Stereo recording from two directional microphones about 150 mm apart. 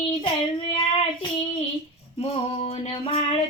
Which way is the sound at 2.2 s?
45° left (ahead or behind).